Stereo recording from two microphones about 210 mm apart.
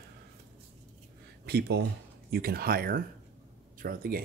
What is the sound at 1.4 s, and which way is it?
Speech, 50° right (ahead or behind).